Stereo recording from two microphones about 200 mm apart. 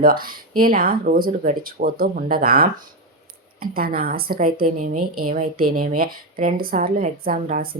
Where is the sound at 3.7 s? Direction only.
50° right (ahead or behind).